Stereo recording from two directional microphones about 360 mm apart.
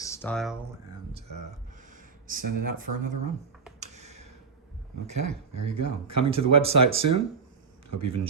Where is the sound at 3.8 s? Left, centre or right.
Centre.